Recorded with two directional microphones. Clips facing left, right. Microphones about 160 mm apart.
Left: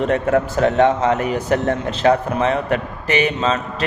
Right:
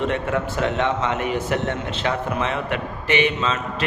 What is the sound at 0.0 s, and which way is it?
A man's voice, 40° left (ahead or behind).